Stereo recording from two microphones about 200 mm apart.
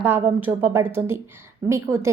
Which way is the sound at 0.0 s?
10° right (ahead or behind).